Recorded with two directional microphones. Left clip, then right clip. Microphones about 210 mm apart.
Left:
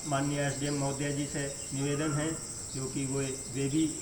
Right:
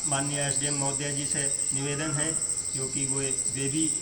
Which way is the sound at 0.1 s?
20° right (ahead or behind).